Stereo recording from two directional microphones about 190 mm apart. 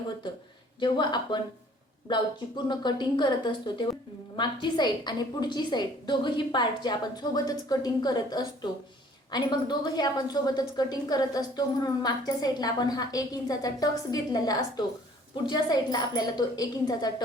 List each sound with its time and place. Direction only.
0.8 s a woman's voice: 25° left (ahead or behind)
2.6 s a woman's voice: 25° left (ahead or behind)